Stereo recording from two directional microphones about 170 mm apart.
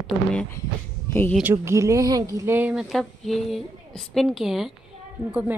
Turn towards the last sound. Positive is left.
turn(degrees=-10)  # may be behind; listen again after turning